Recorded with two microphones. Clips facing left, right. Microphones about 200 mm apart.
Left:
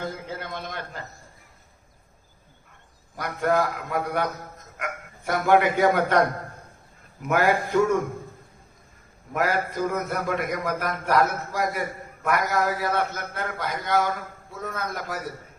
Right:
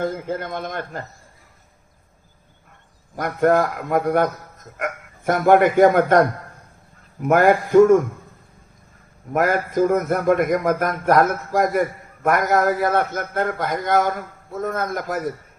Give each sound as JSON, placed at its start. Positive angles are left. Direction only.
{"t": 0.0, "sound": "a man's voice", "side_deg": -50}
{"t": 3.2, "sound": "a man's voice", "side_deg": -50}
{"t": 9.3, "sound": "a man's voice", "side_deg": -50}